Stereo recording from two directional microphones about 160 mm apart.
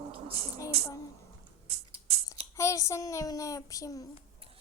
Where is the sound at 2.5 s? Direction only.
20° left (ahead or behind).